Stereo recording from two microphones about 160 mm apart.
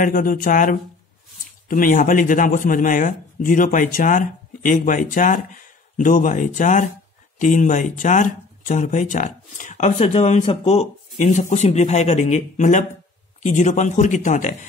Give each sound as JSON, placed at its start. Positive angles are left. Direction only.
{"t": 0.0, "sound": "speech", "side_deg": 60}